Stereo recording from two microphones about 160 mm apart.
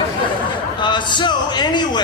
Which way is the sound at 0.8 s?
30° left (ahead or behind).